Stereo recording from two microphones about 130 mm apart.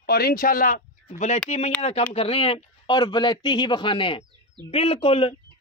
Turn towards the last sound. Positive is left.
turn(degrees=45)  # may be behind; listen again after turning